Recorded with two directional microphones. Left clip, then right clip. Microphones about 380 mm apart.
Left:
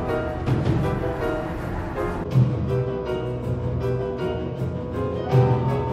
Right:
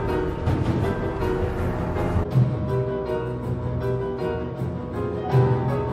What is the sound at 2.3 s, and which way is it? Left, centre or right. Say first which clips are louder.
Music: left 1 dB; centre.